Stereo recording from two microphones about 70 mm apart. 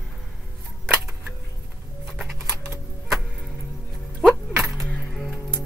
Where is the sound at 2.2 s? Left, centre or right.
Centre.